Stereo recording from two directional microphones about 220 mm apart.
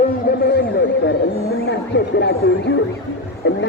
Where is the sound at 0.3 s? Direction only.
40° left (ahead or behind).